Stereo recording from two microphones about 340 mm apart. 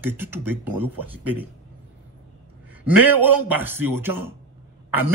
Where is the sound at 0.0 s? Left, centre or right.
Centre.